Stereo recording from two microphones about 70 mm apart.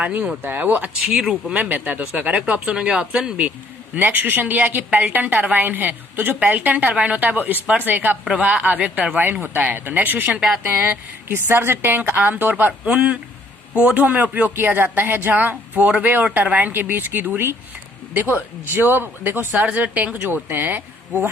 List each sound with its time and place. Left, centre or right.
0.0 s a woman's voice: right
1.1 s speech: centre
3.9 s a woman's voice: right